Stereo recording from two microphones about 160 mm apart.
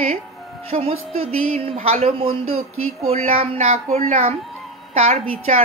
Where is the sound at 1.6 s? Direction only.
35° right (ahead or behind).